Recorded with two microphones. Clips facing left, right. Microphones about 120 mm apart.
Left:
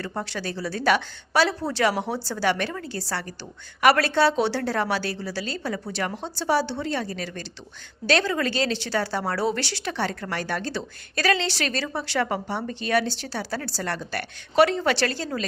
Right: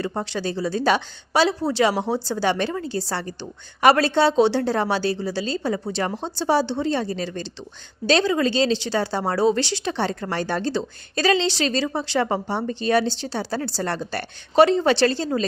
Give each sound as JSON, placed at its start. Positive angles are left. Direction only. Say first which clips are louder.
{"t": 0.0, "sound": "a woman's voice", "louder": "right 5 dB", "side_deg": -25}